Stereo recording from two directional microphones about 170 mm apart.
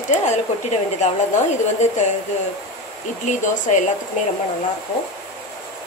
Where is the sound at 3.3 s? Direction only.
45° left (ahead or behind).